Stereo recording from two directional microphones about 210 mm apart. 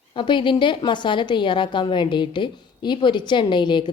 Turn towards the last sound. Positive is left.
turn(degrees=20)  # may be behind; listen again after turning